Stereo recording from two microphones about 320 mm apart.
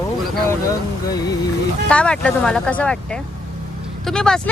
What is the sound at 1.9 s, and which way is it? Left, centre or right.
Speech, centre.